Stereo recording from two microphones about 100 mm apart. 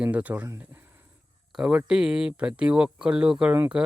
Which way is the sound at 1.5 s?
5° right (ahead or behind).